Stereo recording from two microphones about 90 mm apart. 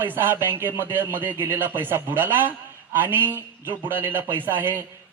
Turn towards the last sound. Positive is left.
turn(degrees=-25)  # may be behind; listen again after turning